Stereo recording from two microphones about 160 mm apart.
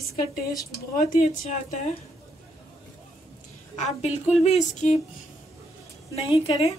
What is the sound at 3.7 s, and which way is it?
A woman's voice, 45° left (ahead or behind).